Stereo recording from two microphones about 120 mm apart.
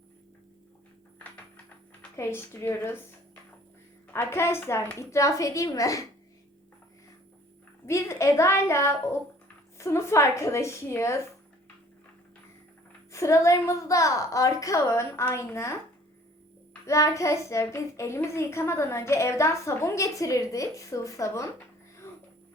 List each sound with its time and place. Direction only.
2.1 s a child's voice: 20° left (ahead or behind)
4.1 s a child's voice: 20° left (ahead or behind)
7.9 s a woman's voice: 25° left (ahead or behind)
13.1 s a child's voice: 25° left (ahead or behind)
16.8 s a child's voice: 25° left (ahead or behind)